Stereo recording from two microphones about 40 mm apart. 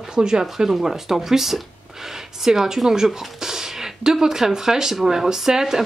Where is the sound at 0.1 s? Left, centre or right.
Centre.